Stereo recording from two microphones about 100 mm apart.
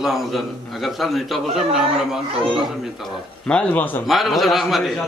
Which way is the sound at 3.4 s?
15° left (ahead or behind).